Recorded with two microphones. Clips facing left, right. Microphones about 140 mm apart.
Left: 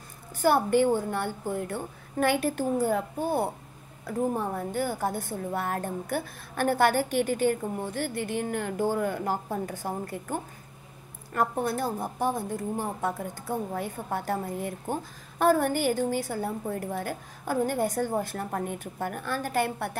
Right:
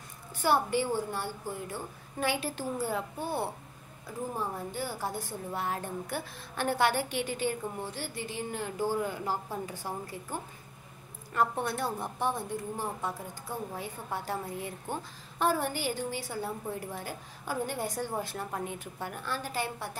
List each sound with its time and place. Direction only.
0.4 s a woman's voice: 50° left (ahead or behind)
4.0 s a woman's voice: 60° left (ahead or behind)
11.3 s a woman's voice: 40° left (ahead or behind); by 20.0 s 60° left (ahead or behind)